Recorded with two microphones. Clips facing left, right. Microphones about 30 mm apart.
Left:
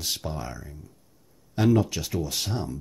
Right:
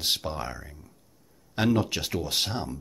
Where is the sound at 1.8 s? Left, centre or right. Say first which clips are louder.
Even; right.